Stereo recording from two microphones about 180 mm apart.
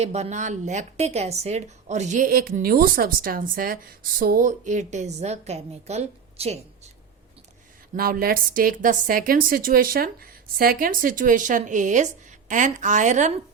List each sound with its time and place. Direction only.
0.0 s speech: 40° right (ahead or behind)
7.9 s a woman's voice: 55° right (ahead or behind)